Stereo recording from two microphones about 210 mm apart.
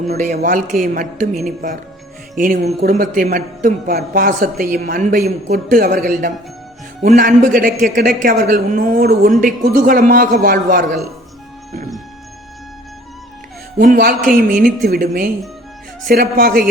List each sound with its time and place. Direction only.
0.1 s a man's voice: 40° right (ahead or behind)
7.0 s a man's voice: 40° right (ahead or behind)
13.7 s speech: 45° right (ahead or behind)